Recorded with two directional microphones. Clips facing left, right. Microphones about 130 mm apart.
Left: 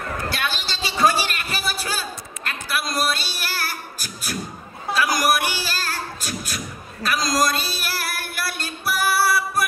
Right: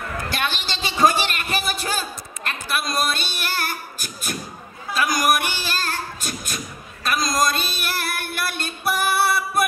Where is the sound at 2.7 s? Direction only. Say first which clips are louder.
Even; 20° right (ahead or behind).